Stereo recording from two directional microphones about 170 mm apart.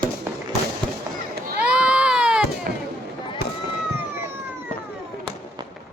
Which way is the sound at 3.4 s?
65° left (ahead or behind).